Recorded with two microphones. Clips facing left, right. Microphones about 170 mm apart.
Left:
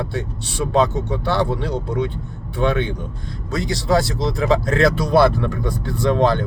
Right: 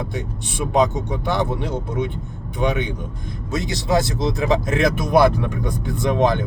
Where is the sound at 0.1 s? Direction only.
15° right (ahead or behind).